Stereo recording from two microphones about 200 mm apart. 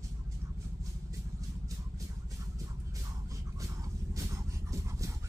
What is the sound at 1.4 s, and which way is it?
Vehicle, 15° right (ahead or behind).